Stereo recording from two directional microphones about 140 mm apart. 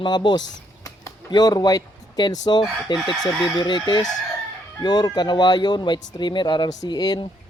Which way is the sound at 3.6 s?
35° left (ahead or behind).